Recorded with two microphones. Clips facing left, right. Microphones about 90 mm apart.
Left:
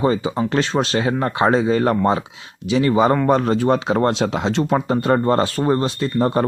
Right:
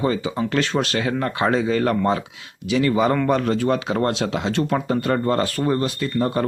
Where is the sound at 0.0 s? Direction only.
25° left (ahead or behind).